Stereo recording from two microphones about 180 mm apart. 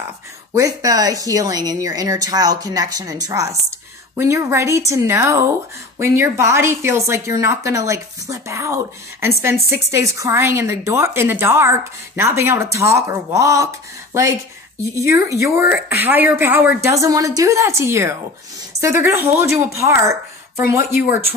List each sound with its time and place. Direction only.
0.6 s speech: 20° right (ahead or behind)